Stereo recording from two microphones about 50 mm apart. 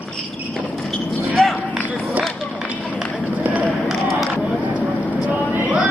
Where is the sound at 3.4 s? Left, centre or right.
Right.